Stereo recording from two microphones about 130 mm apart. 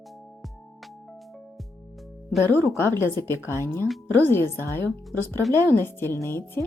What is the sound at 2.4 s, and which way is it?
Speech, 15° left (ahead or behind).